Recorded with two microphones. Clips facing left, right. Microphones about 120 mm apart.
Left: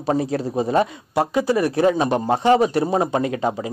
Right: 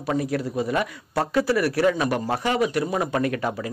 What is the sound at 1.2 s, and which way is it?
A man's voice, 20° left (ahead or behind).